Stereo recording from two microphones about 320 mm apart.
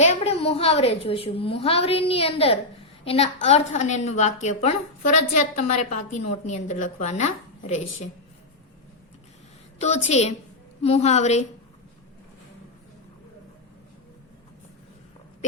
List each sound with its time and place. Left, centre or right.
0.0 s a woman's voice: centre
9.8 s a woman's voice: left